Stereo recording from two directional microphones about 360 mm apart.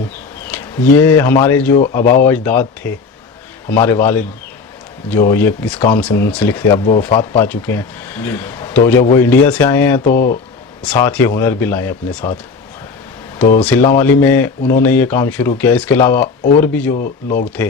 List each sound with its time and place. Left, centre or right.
0.4 s speech: centre
5.3 s speech: centre
10.1 s speech: left
10.8 s speech: centre
13.6 s speech: centre
16.9 s speech: left